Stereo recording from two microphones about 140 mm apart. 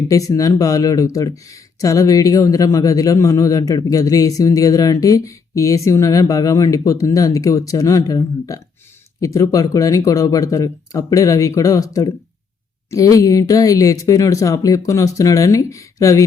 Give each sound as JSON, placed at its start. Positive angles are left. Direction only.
{"t": 0.1, "sound": "speech", "side_deg": 25}